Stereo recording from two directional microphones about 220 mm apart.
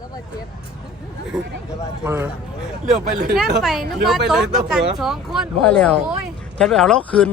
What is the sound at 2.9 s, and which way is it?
Speech, 30° right (ahead or behind).